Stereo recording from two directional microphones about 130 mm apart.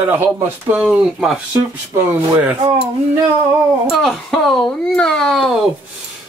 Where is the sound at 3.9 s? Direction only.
Centre (ahead or behind).